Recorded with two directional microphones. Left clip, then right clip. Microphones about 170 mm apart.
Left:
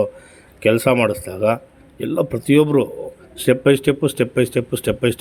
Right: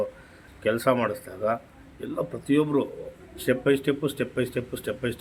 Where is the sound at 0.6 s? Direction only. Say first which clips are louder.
Left 8 dB; 40° left (ahead or behind).